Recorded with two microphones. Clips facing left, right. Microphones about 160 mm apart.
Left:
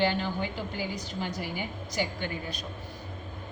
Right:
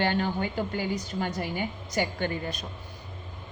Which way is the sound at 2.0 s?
55° right (ahead or behind).